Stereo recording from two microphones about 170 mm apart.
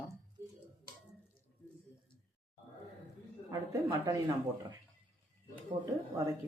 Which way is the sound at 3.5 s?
20° right (ahead or behind).